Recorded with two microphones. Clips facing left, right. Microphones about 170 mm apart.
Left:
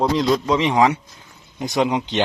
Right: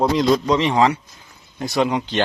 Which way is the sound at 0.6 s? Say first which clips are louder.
Even; 15° left (ahead or behind).